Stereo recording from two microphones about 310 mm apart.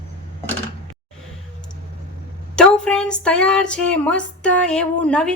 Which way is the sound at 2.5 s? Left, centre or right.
Centre.